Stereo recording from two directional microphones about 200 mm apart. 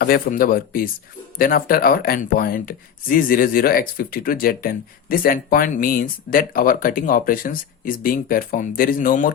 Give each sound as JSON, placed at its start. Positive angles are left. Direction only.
{"t": 0.0, "sound": "speech", "side_deg": 45}